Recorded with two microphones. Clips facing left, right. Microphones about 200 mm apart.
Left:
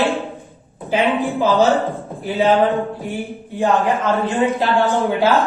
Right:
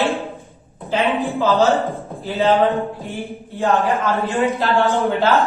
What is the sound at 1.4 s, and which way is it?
Speech, 15° left (ahead or behind).